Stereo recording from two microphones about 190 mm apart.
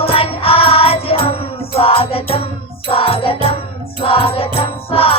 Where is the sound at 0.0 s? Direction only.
30° left (ahead or behind).